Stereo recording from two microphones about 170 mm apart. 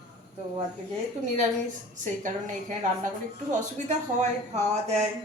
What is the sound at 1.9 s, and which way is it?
Speech, 50° right (ahead or behind).